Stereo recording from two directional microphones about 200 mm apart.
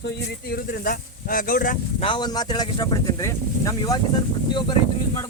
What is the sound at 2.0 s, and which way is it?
Speech, 25° left (ahead or behind).